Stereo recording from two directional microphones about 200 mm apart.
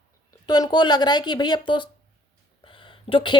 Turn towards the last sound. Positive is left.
turn(degrees=25)  # may be behind; listen again after turning